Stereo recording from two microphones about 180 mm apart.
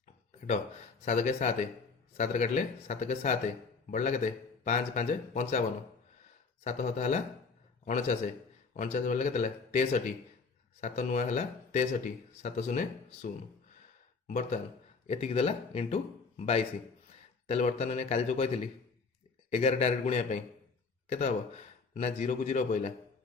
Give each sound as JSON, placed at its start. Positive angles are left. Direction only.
{"t": 1.0, "sound": "speech", "side_deg": 40}
{"t": 6.7, "sound": "speech", "side_deg": 40}